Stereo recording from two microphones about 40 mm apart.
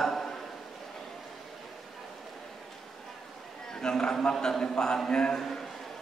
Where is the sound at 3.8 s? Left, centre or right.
Centre.